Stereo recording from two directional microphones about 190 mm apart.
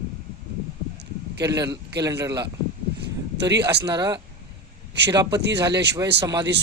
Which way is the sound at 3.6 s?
20° right (ahead or behind).